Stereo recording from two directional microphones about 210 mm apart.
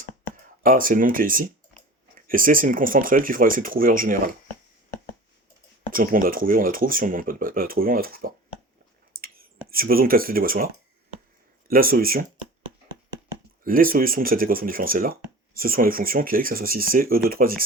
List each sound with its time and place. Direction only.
0.6 s speech: 40° right (ahead or behind)
5.9 s speech: 40° right (ahead or behind)
9.2 s clicking: 45° right (ahead or behind)
9.6 s speech: 45° right (ahead or behind)
11.7 s speech: 45° right (ahead or behind)
13.7 s speech: 40° right (ahead or behind)